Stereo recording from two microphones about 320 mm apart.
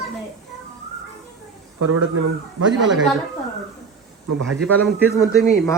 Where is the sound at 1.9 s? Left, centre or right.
Right.